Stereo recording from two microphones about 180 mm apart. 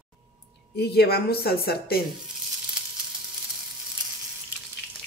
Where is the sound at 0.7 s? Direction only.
60° left (ahead or behind).